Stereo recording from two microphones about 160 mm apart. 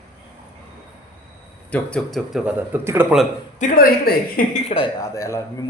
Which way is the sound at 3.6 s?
60° left (ahead or behind).